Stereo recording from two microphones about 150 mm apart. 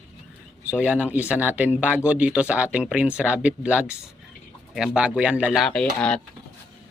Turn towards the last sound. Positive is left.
turn(degrees=5)  # may be behind; listen again after turning